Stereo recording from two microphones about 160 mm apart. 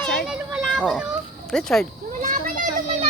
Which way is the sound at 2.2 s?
60° right (ahead or behind).